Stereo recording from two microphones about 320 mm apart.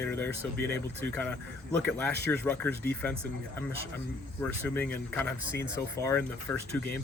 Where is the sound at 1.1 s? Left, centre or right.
Centre.